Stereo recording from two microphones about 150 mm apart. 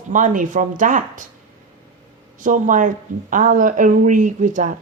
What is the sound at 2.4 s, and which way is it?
Speech, 60° right (ahead or behind).